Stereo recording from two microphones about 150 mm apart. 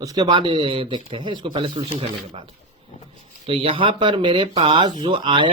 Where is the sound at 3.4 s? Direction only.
40° right (ahead or behind).